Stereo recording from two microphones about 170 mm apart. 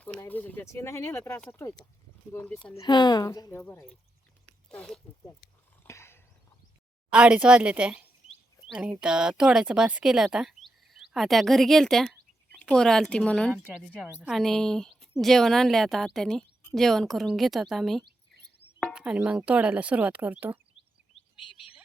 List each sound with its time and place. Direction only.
0.2 s speech: 10° left (ahead or behind)
2.7 s speech: 25° left (ahead or behind); by 4.9 s 5° left (ahead or behind)
5.8 s a sound: 15° left (ahead or behind)
7.1 s a woman's voice: 5° right (ahead or behind)